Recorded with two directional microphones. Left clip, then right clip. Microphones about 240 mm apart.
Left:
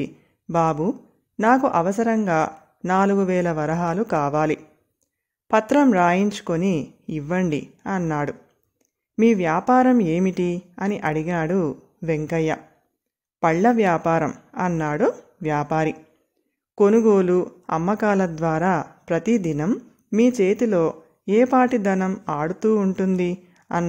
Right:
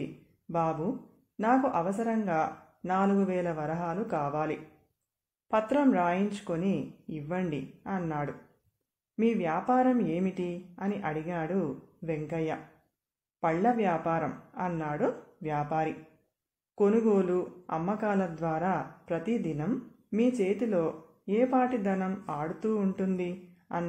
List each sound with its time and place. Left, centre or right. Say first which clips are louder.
0.0 s speech: left 9 dB; left